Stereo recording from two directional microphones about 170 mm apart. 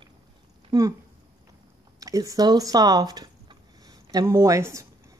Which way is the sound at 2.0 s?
20° right (ahead or behind).